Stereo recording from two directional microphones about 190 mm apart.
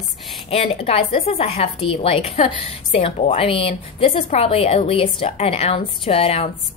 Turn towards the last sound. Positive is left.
turn(degrees=30)  # may be behind; listen again after turning